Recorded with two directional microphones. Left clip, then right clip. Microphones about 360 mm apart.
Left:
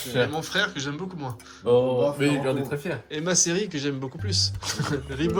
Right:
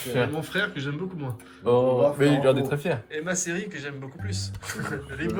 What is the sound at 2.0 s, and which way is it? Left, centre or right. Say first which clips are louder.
Speech: right 2 dB; centre.